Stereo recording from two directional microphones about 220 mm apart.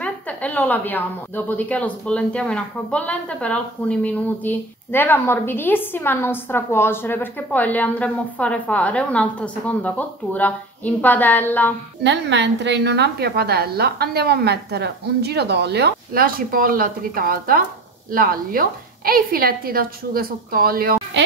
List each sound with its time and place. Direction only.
0.0 s a woman's voice: 5° left (ahead or behind)
12.0 s a woman's voice: 55° right (ahead or behind)